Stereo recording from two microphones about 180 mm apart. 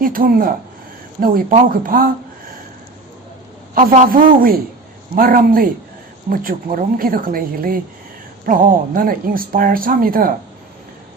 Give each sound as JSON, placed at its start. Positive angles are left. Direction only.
{"t": 0.0, "sound": "speech", "side_deg": -50}
{"t": 3.8, "sound": "speech", "side_deg": -45}